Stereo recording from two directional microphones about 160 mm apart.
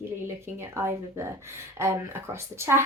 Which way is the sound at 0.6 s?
15° right (ahead or behind).